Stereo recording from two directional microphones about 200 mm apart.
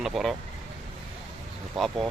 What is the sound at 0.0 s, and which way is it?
Speech, centre (ahead or behind).